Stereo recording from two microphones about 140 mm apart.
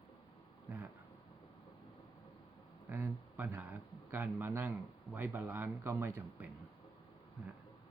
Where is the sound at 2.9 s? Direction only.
15° right (ahead or behind).